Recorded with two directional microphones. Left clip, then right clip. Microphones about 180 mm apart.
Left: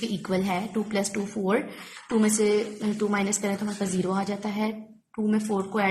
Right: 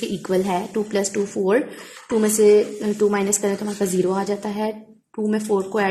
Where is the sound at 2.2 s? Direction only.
30° right (ahead or behind).